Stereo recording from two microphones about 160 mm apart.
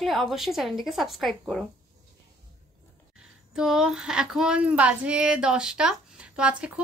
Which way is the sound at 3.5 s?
5° right (ahead or behind).